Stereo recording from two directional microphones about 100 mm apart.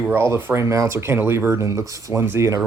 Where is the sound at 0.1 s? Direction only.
20° right (ahead or behind).